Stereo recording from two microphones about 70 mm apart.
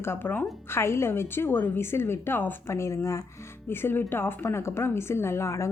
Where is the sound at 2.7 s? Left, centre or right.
Left.